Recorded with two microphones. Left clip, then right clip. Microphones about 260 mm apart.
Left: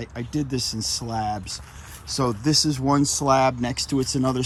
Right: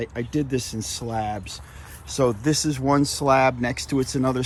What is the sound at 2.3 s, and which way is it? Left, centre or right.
Speech, centre.